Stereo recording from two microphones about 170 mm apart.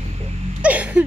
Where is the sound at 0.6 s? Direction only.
10° right (ahead or behind).